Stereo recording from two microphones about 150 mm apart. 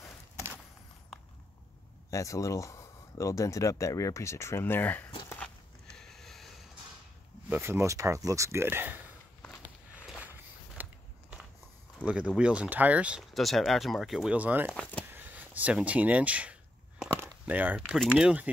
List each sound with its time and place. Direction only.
2.0 s speech: 20° left (ahead or behind)
5.9 s sniff: centre (ahead or behind)
7.4 s speech: 15° right (ahead or behind)
10.0 s walk: 10° right (ahead or behind)
12.0 s speech: 10° right (ahead or behind)
14.7 s speech: 10° left (ahead or behind)
15.0 s speech: 10° right (ahead or behind)